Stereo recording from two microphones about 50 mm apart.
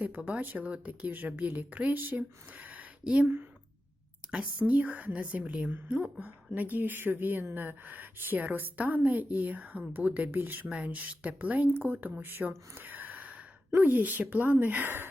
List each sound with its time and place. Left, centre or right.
0.3 s a woman's voice: right
3.0 s speech: right
4.3 s speech: right
6.1 s a woman's voice: right
10.3 s speech: right
10.8 s a woman's voice: right